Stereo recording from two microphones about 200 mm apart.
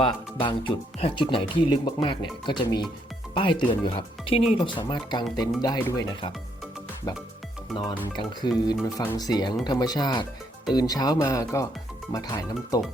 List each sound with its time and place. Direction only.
0.0 s speech: 25° left (ahead or behind)
7.8 s speech: 25° left (ahead or behind)